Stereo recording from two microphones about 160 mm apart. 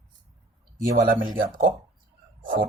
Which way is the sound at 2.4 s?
60° right (ahead or behind).